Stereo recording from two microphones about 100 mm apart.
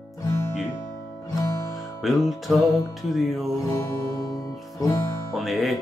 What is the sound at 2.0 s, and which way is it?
Music, centre (ahead or behind).